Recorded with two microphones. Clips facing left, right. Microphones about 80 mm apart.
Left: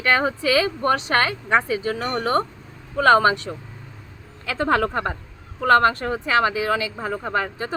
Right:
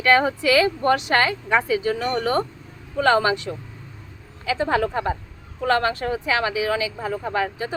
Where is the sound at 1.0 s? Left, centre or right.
Left.